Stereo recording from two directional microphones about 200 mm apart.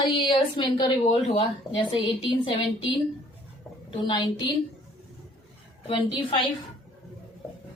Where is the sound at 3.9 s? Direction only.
20° left (ahead or behind).